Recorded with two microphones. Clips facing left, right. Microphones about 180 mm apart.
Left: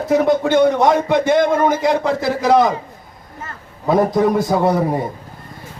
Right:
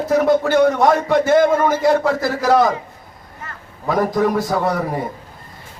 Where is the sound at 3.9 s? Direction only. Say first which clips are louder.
Left 3 dB; 25° left (ahead or behind).